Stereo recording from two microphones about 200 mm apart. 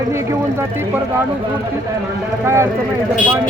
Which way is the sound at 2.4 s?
15° right (ahead or behind).